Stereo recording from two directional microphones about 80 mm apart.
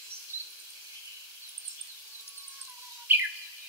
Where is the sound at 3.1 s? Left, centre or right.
Right.